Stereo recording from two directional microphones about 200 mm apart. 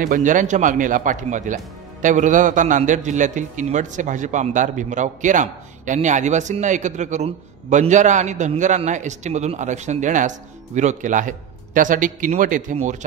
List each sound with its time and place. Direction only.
0.0 s speech: 40° right (ahead or behind)